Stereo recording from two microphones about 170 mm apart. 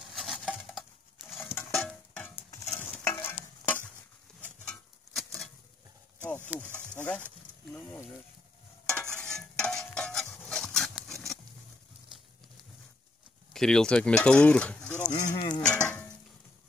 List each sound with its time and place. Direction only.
0.1 s a sound: centre (ahead or behind)
2.5 s stir: 15° left (ahead or behind)
4.6 s a sound: centre (ahead or behind)
6.5 s speech: 10° right (ahead or behind)
7.0 s speech: 10° left (ahead or behind)
8.8 s stir: 15° left (ahead or behind)
9.2 s stir: 5° left (ahead or behind)
13.5 s speech: 5° left (ahead or behind)
15.3 s cutlery: 25° left (ahead or behind)